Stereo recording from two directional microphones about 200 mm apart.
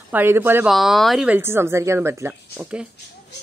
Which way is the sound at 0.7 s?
Centre (ahead or behind).